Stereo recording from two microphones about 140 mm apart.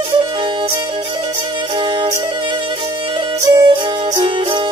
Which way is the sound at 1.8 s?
35° right (ahead or behind).